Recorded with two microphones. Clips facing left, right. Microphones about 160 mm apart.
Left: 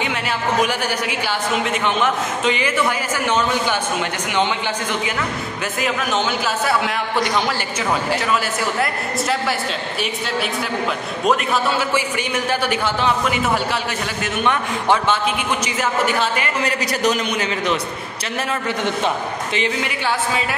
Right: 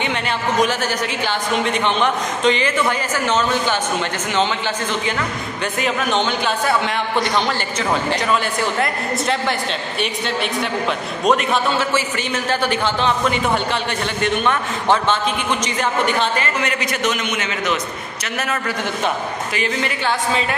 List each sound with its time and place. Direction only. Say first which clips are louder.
0.0 s speech: right 1 dB; 5° left (ahead or behind)
5.8 s a man's voice: right 1 dB; centre (ahead or behind)
8.7 s a man's voice: right 1 dB; 5° left (ahead or behind)
14.4 s speech: even; 15° left (ahead or behind)
16.6 s a man's voice: left 2 dB; 35° left (ahead or behind)
19.5 s a man's voice: even; 20° left (ahead or behind)